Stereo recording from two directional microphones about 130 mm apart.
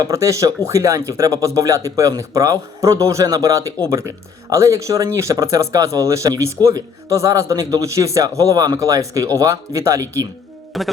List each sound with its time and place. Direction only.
0.0 s speech: 25° right (ahead or behind)
10.7 s a man's voice: centre (ahead or behind)